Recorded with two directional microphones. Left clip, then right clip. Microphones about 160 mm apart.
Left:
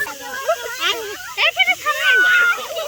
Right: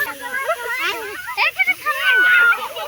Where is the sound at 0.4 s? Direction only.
Centre (ahead or behind).